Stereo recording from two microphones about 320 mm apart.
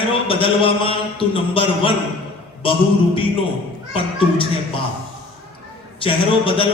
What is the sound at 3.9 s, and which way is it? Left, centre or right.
Speech, centre.